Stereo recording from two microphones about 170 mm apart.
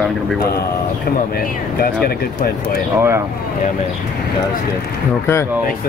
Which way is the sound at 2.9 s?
15° right (ahead or behind).